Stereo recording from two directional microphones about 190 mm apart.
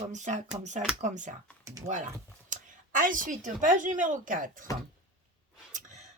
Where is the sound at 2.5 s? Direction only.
45° right (ahead or behind).